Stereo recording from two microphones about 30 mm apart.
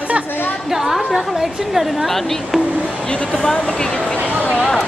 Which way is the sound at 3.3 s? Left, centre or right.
Centre.